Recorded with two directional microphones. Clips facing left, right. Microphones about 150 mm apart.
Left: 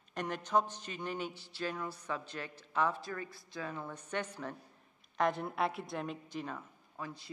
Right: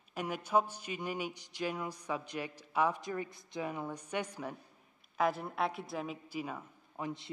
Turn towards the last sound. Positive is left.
turn(degrees=-20)  # may be behind; listen again after turning